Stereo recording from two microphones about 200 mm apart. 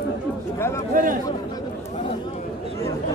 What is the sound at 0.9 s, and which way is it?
Speech, 45° right (ahead or behind).